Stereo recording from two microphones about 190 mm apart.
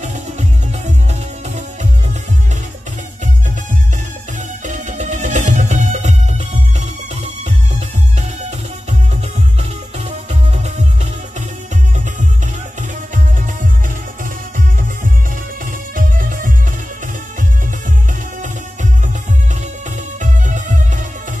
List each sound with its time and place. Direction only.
4.6 s music: 40° right (ahead or behind)
16.2 s music: 45° right (ahead or behind)
20.2 s music: 40° right (ahead or behind)